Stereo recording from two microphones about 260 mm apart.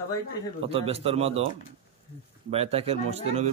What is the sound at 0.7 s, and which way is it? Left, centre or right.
Speech, right.